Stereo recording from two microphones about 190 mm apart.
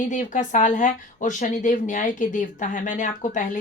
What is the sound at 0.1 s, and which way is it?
A woman's voice, 40° left (ahead or behind).